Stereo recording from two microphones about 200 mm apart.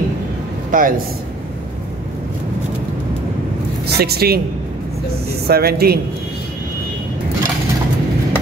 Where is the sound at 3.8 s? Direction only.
50° right (ahead or behind).